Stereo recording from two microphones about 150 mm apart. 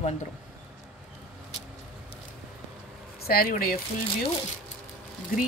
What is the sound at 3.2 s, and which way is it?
Speech, 75° left (ahead or behind).